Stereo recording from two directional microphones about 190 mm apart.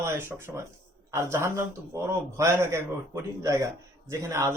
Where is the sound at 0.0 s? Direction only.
15° right (ahead or behind).